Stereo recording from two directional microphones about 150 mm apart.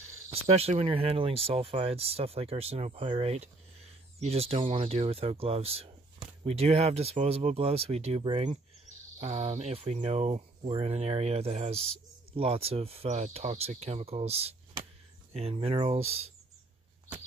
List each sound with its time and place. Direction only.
0.3 s speech: 40° right (ahead or behind)
8.2 s speech: 30° right (ahead or behind)
9.2 s speech: 45° right (ahead or behind)